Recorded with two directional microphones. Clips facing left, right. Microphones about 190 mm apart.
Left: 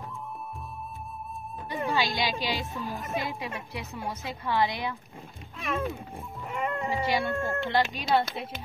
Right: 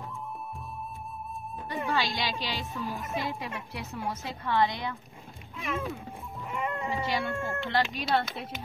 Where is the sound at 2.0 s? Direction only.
10° left (ahead or behind).